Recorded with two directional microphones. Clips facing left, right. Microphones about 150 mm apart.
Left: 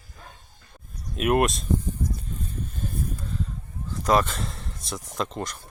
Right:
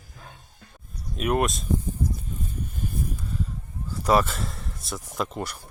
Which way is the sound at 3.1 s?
10° right (ahead or behind).